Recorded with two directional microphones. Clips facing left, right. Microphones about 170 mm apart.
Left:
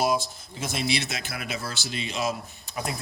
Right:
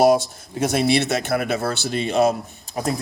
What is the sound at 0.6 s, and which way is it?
Speech, 60° right (ahead or behind).